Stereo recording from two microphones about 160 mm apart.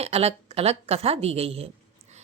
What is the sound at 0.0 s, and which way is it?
Speech, 40° right (ahead or behind).